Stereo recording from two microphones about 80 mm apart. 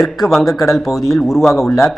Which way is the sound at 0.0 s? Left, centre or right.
Centre.